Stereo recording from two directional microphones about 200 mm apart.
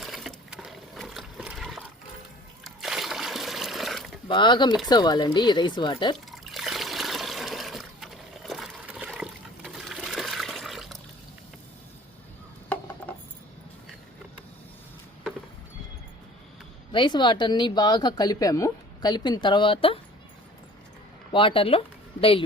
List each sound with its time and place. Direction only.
0.0 s a sound: centre (ahead or behind)
2.6 s splash: centre (ahead or behind)
4.3 s speech: 25° left (ahead or behind)
6.1 s water: centre (ahead or behind)
13.1 s a sound: 10° left (ahead or behind)
16.9 s speech: 25° left (ahead or behind)
21.3 s speech: 25° left (ahead or behind)